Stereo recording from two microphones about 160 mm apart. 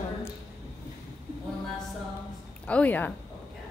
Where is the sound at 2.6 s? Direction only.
10° left (ahead or behind).